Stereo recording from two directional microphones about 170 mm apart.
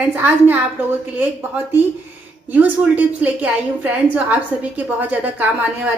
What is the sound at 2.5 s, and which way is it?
A woman's voice, 10° right (ahead or behind).